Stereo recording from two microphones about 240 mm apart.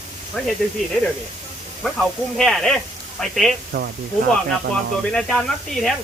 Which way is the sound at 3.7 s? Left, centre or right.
Right.